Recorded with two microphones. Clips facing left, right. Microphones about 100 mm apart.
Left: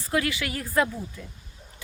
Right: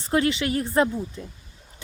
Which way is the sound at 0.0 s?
25° right (ahead or behind).